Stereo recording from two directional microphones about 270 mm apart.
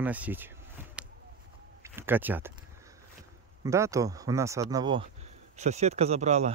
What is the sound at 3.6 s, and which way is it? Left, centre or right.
Speech, centre.